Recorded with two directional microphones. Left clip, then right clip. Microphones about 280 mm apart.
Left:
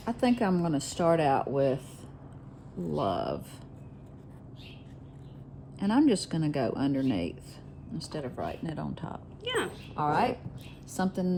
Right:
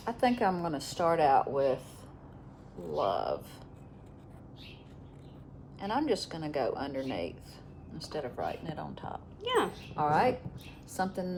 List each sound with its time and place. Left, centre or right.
0.0 s speech: left
2.9 s speech: left
5.8 s speech: left
9.4 s speech: centre
10.0 s speech: left